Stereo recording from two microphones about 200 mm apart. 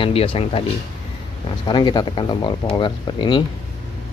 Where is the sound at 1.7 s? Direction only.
20° left (ahead or behind).